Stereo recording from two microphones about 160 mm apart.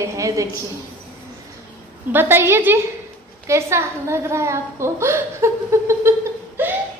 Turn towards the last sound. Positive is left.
turn(degrees=-15)  # may be behind; listen again after turning